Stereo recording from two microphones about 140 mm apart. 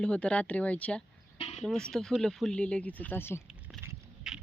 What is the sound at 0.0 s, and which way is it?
A woman's voice, 5° left (ahead or behind).